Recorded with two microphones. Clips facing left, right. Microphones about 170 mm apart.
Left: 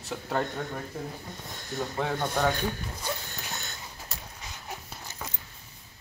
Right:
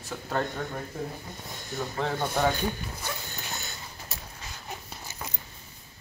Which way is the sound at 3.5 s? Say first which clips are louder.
Right 1 dB; 5° right (ahead or behind).